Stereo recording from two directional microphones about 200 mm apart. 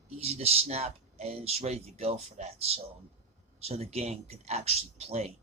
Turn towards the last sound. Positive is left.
turn(degrees=-30)  # may be behind; listen again after turning